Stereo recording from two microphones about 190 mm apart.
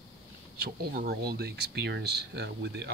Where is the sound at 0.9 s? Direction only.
55° right (ahead or behind).